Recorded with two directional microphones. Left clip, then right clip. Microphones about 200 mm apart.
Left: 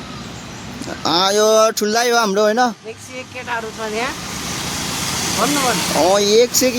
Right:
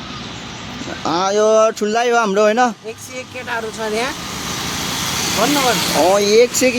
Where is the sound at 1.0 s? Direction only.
5° left (ahead or behind).